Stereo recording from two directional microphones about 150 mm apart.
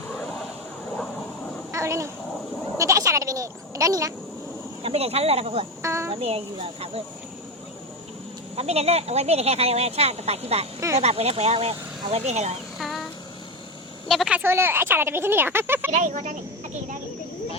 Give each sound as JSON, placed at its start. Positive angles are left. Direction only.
{"t": 1.7, "sound": "a sound", "side_deg": -20}
{"t": 2.7, "sound": "goat", "side_deg": -20}
{"t": 4.8, "sound": "speech", "side_deg": -40}
{"t": 5.8, "sound": "a child's voice", "side_deg": -20}
{"t": 6.1, "sound": "speech", "side_deg": -40}
{"t": 8.5, "sound": "speech", "side_deg": -45}
{"t": 10.8, "sound": "speech", "side_deg": -20}
{"t": 11.0, "sound": "speech", "side_deg": -45}
{"t": 12.8, "sound": "a sound", "side_deg": 0}
{"t": 14.1, "sound": "speech", "side_deg": -5}
{"t": 15.9, "sound": "speech", "side_deg": -50}